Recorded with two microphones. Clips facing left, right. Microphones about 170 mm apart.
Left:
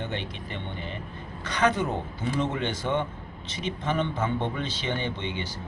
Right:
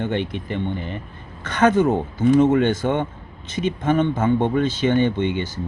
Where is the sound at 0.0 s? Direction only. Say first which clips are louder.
Right 10 dB; 55° right (ahead or behind).